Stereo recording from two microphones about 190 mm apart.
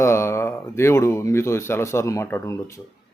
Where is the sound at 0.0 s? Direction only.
15° left (ahead or behind).